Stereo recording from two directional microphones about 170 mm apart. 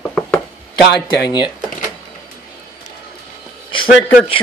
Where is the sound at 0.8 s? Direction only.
80° left.